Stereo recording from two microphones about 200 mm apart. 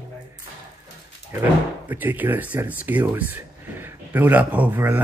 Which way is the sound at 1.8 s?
10° right (ahead or behind).